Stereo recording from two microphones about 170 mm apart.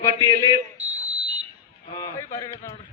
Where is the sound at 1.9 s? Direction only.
20° left (ahead or behind).